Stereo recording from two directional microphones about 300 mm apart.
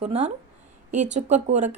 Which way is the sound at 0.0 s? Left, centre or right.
Right.